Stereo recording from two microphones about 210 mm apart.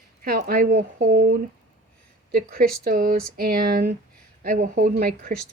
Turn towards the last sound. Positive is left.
turn(degrees=-40)  # may be behind; listen again after turning